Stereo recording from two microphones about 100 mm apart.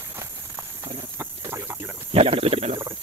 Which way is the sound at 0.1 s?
30° right (ahead or behind).